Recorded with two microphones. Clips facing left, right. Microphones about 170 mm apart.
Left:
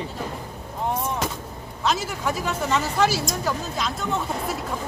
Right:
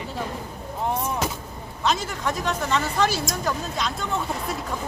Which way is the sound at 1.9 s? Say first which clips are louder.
Even; 5° left (ahead or behind).